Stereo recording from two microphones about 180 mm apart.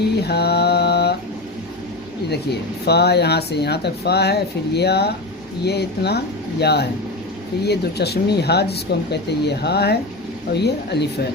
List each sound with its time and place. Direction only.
0.2 s mantra: 65° left (ahead or behind)
2.3 s speech: 65° left (ahead or behind)